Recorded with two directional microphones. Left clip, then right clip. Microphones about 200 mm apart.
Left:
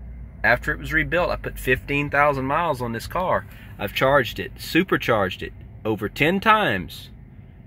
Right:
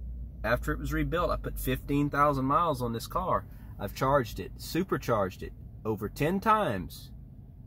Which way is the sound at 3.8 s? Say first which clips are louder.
Left 9 dB; 20° left (ahead or behind).